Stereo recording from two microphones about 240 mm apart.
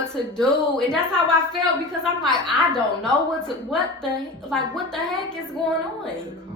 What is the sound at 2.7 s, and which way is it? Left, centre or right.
A woman's voice, centre.